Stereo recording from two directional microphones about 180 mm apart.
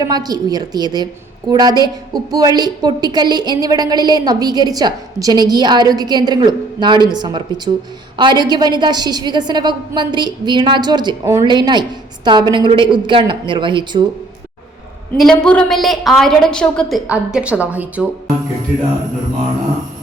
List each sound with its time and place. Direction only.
0.0 s a woman's voice: 20° right (ahead or behind)
15.2 s a woman's voice: 5° left (ahead or behind)
17.1 s a woman's voice: 5° right (ahead or behind)